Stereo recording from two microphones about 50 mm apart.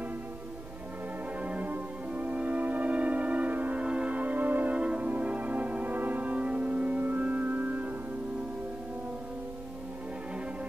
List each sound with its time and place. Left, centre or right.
1.4 s music: right